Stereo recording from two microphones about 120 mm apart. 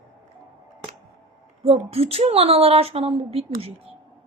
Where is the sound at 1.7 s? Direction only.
55° right (ahead or behind).